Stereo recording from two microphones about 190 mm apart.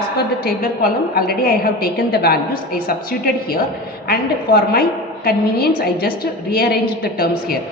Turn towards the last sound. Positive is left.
turn(degrees=55)  # may be behind; listen again after turning